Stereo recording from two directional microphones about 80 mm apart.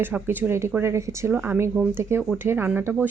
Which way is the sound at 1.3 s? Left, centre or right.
Right.